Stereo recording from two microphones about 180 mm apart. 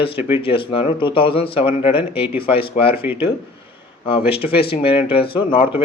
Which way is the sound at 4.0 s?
30° left (ahead or behind).